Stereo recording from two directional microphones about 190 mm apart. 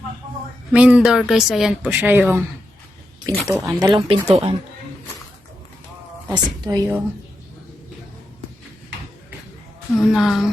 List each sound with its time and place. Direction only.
0.7 s speech: 5° right (ahead or behind)
3.4 s speech: centre (ahead or behind)
3.7 s speech: 20° right (ahead or behind)
6.3 s speech: 20° right (ahead or behind)
10.0 s speech: centre (ahead or behind)